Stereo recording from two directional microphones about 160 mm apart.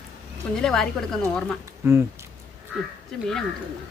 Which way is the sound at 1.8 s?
20° right (ahead or behind).